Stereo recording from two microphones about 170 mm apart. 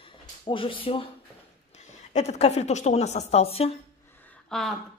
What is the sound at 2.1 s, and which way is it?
A woman's voice, 40° left (ahead or behind).